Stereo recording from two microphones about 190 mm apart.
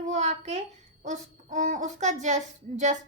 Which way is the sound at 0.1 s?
35° right (ahead or behind).